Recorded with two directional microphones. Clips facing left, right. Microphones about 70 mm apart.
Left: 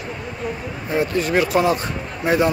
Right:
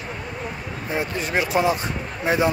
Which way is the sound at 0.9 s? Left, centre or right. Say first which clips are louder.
Left 5 dB; centre.